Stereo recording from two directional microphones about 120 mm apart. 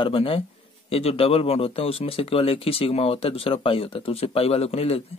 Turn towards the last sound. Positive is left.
turn(degrees=55)  # may be behind; listen again after turning